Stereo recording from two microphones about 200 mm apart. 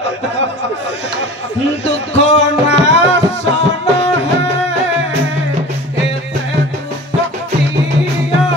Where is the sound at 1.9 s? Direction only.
30° left (ahead or behind).